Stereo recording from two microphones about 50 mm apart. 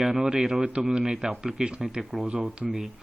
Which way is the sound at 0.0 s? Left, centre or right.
Centre.